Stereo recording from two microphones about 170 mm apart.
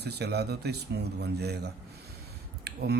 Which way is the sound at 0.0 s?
75° right (ahead or behind).